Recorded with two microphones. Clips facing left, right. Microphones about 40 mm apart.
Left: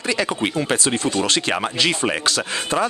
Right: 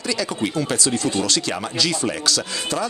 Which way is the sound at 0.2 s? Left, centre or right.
Left.